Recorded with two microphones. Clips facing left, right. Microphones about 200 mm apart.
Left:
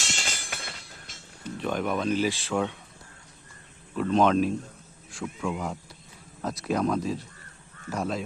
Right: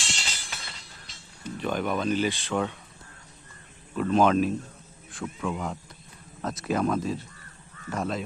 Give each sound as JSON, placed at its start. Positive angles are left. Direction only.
{"t": 0.0, "sound": "music", "side_deg": 45}
{"t": 1.5, "sound": "speech", "side_deg": 0}
{"t": 3.9, "sound": "speech", "side_deg": -5}